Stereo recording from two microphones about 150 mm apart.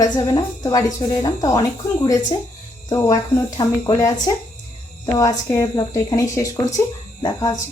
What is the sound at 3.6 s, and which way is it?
A woman's voice, 25° left (ahead or behind).